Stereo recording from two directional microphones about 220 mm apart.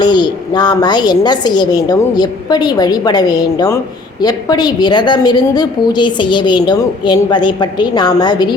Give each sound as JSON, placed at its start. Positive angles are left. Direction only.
{"t": 0.0, "sound": "a woman's voice", "side_deg": 20}